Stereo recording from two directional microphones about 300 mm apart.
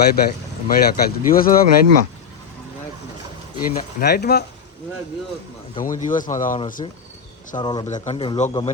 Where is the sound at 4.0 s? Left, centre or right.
Left.